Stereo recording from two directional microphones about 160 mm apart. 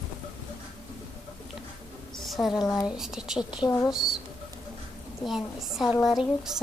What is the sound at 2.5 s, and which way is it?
Speech, 20° left (ahead or behind).